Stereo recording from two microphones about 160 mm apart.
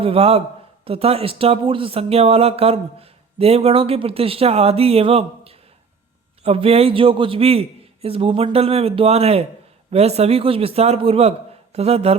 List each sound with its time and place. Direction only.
0.0 s speech: 40° right (ahead or behind)